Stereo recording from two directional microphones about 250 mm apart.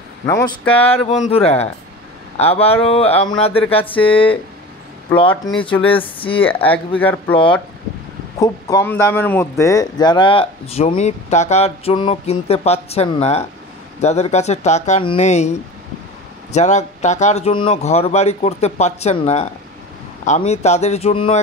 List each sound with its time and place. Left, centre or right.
0.3 s speech: centre
0.7 s speech: left
5.3 s speech: centre
5.9 s speech: left
6.4 s speech: centre
8.4 s speech: centre
16.5 s speech: left